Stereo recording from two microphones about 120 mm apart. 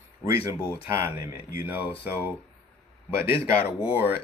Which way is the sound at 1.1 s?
25° right (ahead or behind).